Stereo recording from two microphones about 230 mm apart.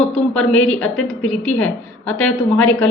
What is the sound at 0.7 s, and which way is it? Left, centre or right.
Speech, centre.